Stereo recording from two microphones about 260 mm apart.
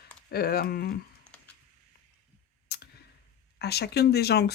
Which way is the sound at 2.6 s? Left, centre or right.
Left.